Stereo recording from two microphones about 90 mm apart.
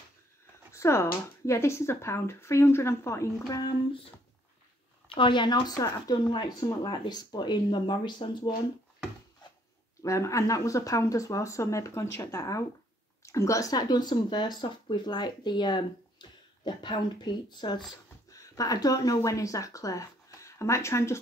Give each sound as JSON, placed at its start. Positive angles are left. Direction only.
{"t": 0.7, "sound": "speech", "side_deg": 30}
{"t": 5.1, "sound": "speech", "side_deg": 65}
{"t": 10.0, "sound": "speech", "side_deg": 35}
{"t": 18.6, "sound": "speech", "side_deg": 40}